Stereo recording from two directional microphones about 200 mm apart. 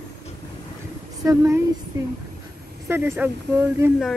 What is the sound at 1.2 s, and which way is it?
Speech, 15° right (ahead or behind).